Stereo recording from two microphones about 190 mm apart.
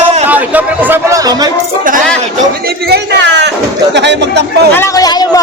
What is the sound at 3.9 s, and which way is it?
Speech, 65° right (ahead or behind).